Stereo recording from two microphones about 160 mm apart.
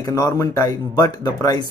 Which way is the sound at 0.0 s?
20° left (ahead or behind).